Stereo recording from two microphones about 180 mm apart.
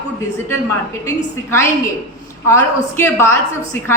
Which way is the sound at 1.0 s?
15° left (ahead or behind).